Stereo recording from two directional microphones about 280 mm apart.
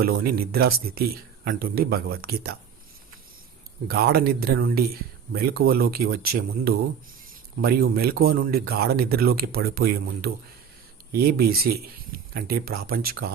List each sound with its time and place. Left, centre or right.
0.0 s speech: right
3.8 s speech: right